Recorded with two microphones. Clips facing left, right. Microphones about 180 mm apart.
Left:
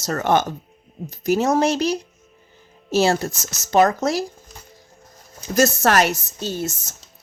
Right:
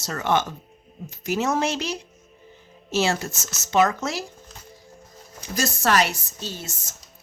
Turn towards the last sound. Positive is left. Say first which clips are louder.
# left 9 dB
turn(degrees=45)  # may be behind; listen again after turning